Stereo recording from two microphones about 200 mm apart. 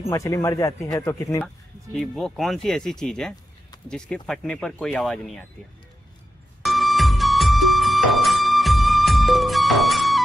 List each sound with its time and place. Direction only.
0.1 s a man's voice: 15° left (ahead or behind)
2.0 s speech: centre (ahead or behind)
6.6 s music: centre (ahead or behind)